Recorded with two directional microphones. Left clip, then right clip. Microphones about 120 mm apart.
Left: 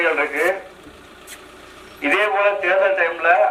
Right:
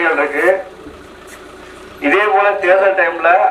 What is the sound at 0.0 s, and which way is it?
Speech, 5° left (ahead or behind).